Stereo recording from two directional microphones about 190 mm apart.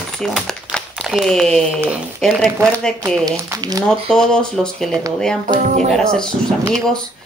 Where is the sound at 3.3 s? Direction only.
20° right (ahead or behind).